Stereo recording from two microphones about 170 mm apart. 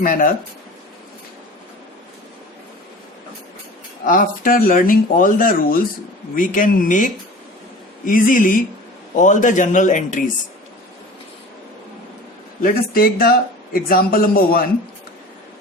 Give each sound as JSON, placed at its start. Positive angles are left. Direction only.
{"t": 0.0, "sound": "speech", "side_deg": 55}
{"t": 4.0, "sound": "speech", "side_deg": 50}
{"t": 12.6, "sound": "speech", "side_deg": 60}